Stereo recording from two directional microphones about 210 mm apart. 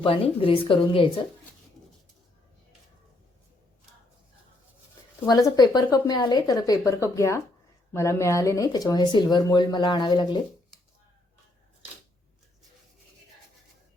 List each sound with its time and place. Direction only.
0.0 s speech: 25° left (ahead or behind)
5.2 s a woman's voice: 20° left (ahead or behind)